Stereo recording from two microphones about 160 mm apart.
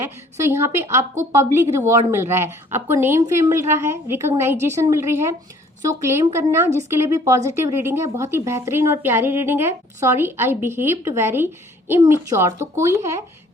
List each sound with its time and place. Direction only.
0.0 s a woman's voice: 15° right (ahead or behind)